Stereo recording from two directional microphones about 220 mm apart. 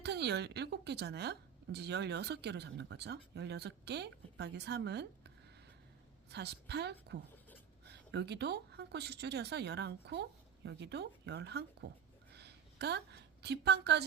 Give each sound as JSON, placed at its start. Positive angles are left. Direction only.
{"t": 0.0, "sound": "a woman's voice", "side_deg": -50}
{"t": 6.3, "sound": "a woman's voice", "side_deg": -50}
{"t": 12.3, "sound": "a sound", "side_deg": -50}